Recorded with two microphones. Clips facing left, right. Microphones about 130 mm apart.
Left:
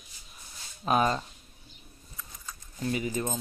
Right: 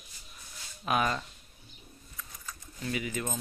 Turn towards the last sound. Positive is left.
turn(degrees=30)  # may be behind; listen again after turning